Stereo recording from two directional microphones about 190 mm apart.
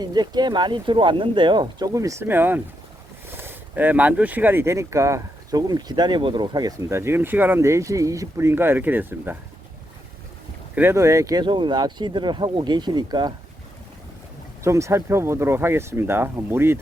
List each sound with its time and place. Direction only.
0.0 s speech: 20° right (ahead or behind)
10.8 s speech: 15° right (ahead or behind)
14.6 s speech: 15° right (ahead or behind)